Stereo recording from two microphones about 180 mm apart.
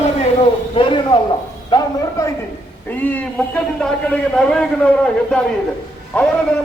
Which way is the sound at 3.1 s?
10° left (ahead or behind).